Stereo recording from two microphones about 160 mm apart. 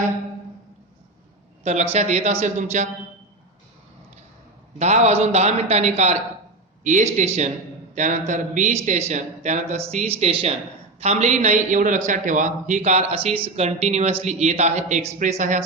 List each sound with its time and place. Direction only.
1.6 s a man's voice: 40° right (ahead or behind)
4.8 s a man's voice: 45° right (ahead or behind)